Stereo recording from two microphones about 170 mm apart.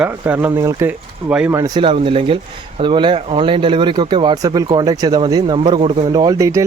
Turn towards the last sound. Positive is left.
turn(degrees=-20)  # may be behind; listen again after turning